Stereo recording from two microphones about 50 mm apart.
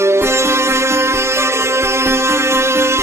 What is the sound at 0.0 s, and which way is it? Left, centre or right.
Music, right.